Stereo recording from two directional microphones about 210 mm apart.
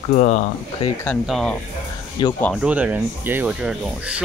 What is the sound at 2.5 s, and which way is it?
Speech, 5° right (ahead or behind).